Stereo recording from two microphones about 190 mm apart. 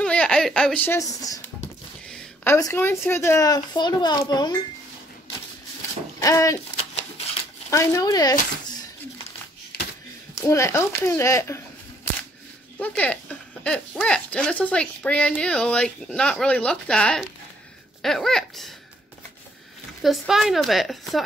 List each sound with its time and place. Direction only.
0.0 s a woman's voice: 5° left (ahead or behind); by 4.6 s 20° left (ahead or behind)
6.1 s speech: 15° left (ahead or behind)
7.7 s speech: 15° left (ahead or behind)
10.3 s speech: 15° left (ahead or behind)
20.0 s speech: centre (ahead or behind)